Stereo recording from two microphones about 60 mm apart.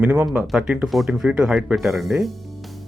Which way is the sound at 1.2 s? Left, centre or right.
Centre.